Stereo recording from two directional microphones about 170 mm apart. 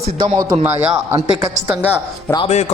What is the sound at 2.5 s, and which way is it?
Speech, 40° left (ahead or behind).